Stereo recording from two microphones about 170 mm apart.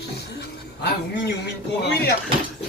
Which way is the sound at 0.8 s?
75° left (ahead or behind).